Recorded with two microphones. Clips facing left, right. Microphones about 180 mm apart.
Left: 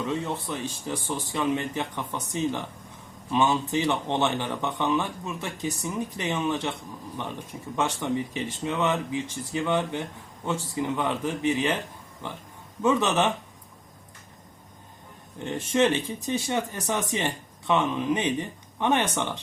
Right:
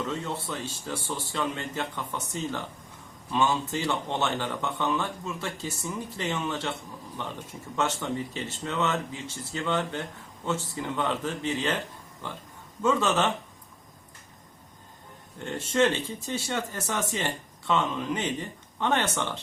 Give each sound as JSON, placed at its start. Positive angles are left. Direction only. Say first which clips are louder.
{"t": 0.0, "sound": "speech", "louder": "left 3 dB", "side_deg": 15}
{"t": 7.8, "sound": "speech", "louder": "left 2 dB", "side_deg": 15}
{"t": 12.8, "sound": "speech", "louder": "left 2 dB", "side_deg": 15}
{"t": 15.4, "sound": "speech", "louder": "left 1 dB", "side_deg": 15}